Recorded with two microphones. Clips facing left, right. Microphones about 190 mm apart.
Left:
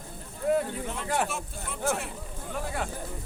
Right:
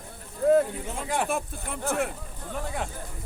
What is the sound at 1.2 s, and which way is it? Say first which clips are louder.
Speech: right 5 dB; 55° right (ahead or behind).